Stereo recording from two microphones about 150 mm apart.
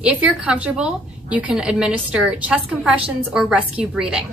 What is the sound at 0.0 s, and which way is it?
A woman's voice, 10° right (ahead or behind).